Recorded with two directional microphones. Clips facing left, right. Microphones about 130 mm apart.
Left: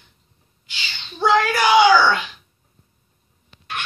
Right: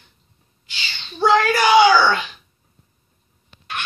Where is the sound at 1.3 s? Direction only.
5° left (ahead or behind).